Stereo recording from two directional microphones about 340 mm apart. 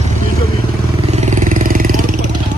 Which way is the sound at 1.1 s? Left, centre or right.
Centre.